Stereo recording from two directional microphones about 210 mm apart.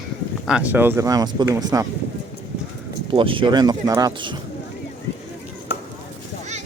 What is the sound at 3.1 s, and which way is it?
Speech, 25° right (ahead or behind).